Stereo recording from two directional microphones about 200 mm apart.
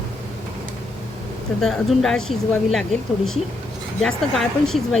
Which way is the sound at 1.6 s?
Centre (ahead or behind).